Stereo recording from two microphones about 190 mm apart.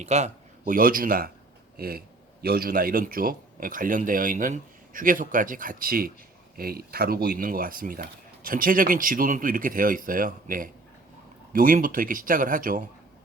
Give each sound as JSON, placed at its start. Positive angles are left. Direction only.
{"t": 0.0, "sound": "a man's voice", "side_deg": -35}
{"t": 0.6, "sound": "speech", "side_deg": -50}